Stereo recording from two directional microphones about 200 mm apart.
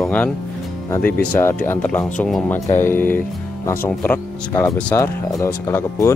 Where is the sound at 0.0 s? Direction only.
5° left (ahead or behind).